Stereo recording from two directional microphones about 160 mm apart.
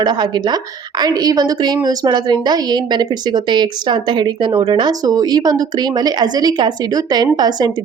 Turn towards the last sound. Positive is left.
turn(degrees=-25)  # may be behind; listen again after turning